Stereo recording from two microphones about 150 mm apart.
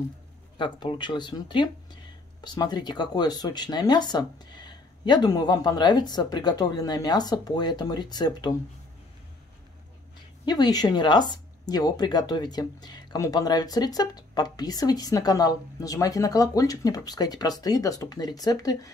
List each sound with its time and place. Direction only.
0.6 s speech: 30° left (ahead or behind)
10.4 s speech: 25° left (ahead or behind)